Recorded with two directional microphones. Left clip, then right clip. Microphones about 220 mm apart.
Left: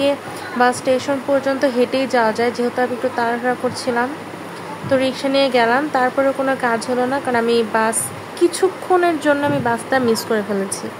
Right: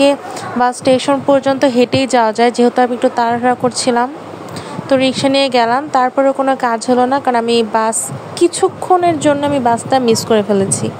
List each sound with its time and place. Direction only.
0.0 s a woman's voice: 25° right (ahead or behind)